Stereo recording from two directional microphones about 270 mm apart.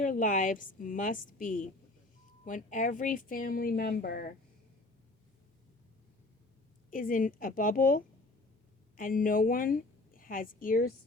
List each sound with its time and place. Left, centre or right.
0.0 s a woman's voice: left
6.9 s a woman's voice: left